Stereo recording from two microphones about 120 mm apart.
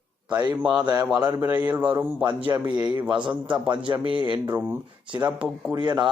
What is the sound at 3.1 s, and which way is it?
A man's voice, 40° right (ahead or behind).